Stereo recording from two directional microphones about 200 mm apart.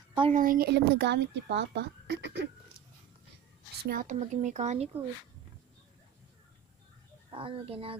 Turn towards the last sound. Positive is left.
turn(degrees=-30)  # may be behind; listen again after turning